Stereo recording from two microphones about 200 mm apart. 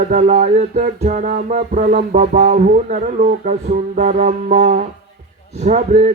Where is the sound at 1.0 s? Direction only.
45° right (ahead or behind).